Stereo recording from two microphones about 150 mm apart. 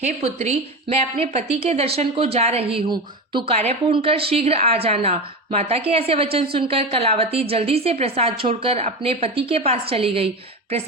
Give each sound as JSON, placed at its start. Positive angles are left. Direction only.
{"t": 0.0, "sound": "a woman's voice", "side_deg": -45}